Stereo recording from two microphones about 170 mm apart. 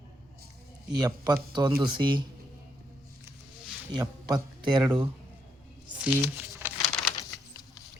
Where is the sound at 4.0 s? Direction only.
25° right (ahead or behind).